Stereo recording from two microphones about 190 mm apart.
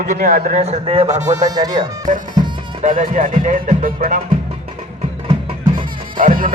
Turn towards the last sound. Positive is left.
turn(degrees=-45)  # may be behind; listen again after turning